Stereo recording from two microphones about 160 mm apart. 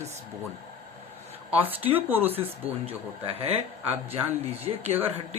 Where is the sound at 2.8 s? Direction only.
40° right (ahead or behind).